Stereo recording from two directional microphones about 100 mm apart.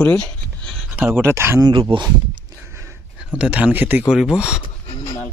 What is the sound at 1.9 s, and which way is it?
Speech, 50° right (ahead or behind).